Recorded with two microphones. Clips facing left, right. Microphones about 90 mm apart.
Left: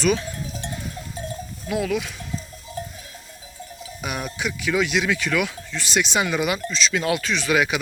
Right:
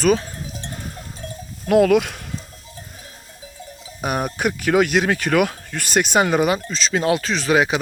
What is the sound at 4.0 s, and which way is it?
Speech, 45° right (ahead or behind).